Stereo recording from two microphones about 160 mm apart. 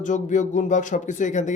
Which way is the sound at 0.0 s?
50° left (ahead or behind).